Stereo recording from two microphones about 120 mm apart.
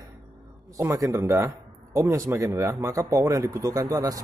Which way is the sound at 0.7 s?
25° right (ahead or behind).